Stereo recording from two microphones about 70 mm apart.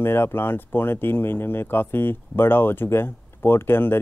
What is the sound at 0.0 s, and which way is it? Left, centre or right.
Speech, left.